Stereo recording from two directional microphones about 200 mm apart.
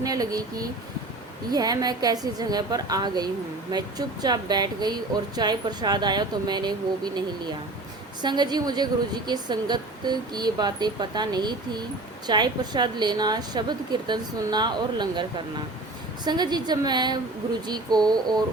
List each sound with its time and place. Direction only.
0.0 s a woman's voice: 20° right (ahead or behind)